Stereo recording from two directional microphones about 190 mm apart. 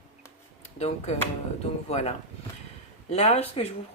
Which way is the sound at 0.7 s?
35° left (ahead or behind).